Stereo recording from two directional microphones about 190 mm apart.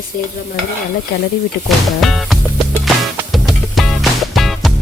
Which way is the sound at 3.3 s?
Centre (ahead or behind).